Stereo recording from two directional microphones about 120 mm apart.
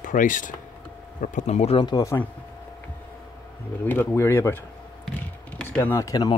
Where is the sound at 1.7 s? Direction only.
40° left (ahead or behind).